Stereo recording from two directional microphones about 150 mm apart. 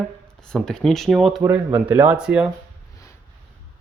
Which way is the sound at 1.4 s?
15° right (ahead or behind).